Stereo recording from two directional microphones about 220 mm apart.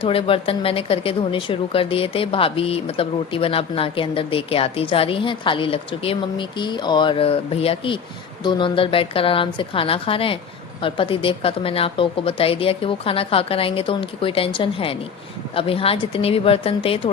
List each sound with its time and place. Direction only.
0.0 s speech: 25° left (ahead or behind)